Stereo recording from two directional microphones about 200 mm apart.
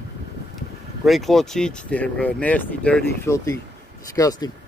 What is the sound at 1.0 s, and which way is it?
Speech, centre (ahead or behind).